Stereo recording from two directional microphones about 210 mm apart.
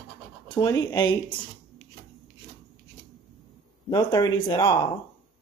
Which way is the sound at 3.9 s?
20° left (ahead or behind).